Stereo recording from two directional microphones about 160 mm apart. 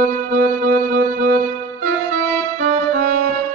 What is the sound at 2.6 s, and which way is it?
Music, 55° right (ahead or behind).